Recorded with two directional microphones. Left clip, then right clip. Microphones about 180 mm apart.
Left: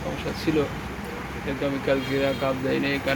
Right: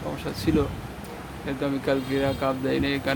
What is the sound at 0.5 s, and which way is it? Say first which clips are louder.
Speech: even; 25° right (ahead or behind).